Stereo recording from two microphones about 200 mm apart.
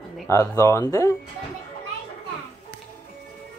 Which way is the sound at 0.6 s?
15° left (ahead or behind).